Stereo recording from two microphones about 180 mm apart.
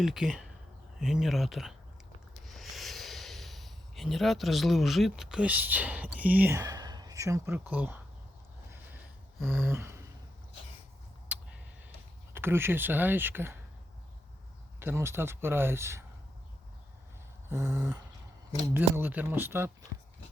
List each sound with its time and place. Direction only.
0.0 s speech: centre (ahead or behind)
2.4 s snort: centre (ahead or behind)
6.6 s speech: 20° right (ahead or behind)
9.6 s speech: 15° right (ahead or behind)
11.3 s a sound: 5° right (ahead or behind)
12.3 s speech: 15° right (ahead or behind)
14.8 s speech: 15° right (ahead or behind)
17.5 s a sound: 20° right (ahead or behind)
18.7 s speech: 10° right (ahead or behind)